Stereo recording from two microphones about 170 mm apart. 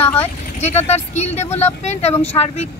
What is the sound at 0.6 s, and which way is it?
Speech, 40° left (ahead or behind).